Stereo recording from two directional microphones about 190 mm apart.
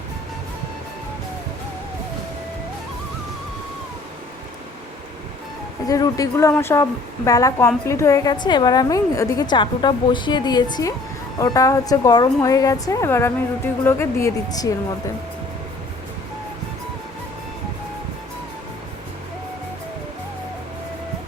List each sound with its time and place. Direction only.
5.9 s a woman's voice: 15° left (ahead or behind)